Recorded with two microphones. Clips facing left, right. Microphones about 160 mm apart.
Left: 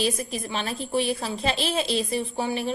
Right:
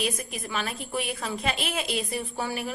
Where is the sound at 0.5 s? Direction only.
30° left (ahead or behind).